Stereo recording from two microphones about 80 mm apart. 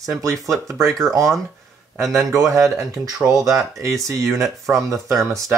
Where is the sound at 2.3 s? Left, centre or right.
Right.